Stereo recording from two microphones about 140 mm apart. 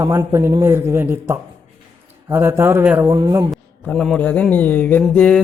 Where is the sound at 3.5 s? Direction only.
5° left (ahead or behind).